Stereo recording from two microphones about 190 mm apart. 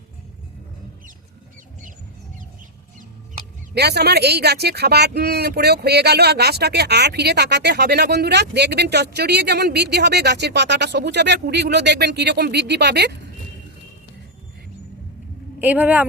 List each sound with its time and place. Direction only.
3.8 s speech: 60° right (ahead or behind)
15.5 s speech: 10° right (ahead or behind)